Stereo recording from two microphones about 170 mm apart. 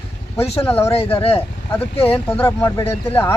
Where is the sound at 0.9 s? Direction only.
35° left (ahead or behind).